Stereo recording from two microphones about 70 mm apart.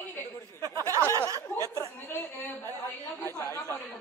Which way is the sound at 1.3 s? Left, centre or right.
Right.